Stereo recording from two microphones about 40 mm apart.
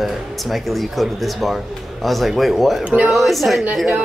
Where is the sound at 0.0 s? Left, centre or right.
Centre.